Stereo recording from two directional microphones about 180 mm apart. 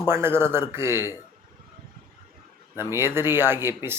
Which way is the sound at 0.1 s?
15° right (ahead or behind).